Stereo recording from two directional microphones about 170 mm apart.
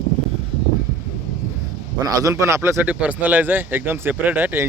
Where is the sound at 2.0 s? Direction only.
20° right (ahead or behind).